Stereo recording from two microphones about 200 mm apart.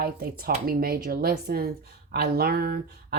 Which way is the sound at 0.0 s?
50° right (ahead or behind).